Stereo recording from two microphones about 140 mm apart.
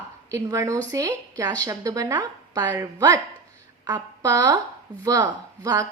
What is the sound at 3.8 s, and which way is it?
Speech, 30° right (ahead or behind).